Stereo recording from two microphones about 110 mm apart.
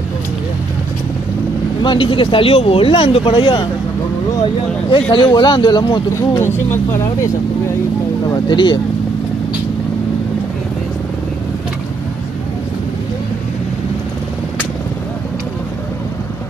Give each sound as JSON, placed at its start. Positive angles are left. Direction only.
{"t": 1.8, "sound": "speech", "side_deg": 45}
{"t": 5.1, "sound": "speech", "side_deg": 45}
{"t": 6.3, "sound": "speech", "side_deg": 20}
{"t": 8.5, "sound": "speech", "side_deg": 45}